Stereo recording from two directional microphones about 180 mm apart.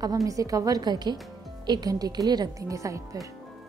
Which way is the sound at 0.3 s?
20° right (ahead or behind).